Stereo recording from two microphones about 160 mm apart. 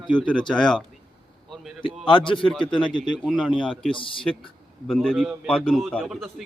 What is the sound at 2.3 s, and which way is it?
Speech, 30° left (ahead or behind).